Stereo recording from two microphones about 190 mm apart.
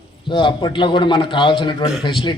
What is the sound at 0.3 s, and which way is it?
A man's voice, 25° left (ahead or behind).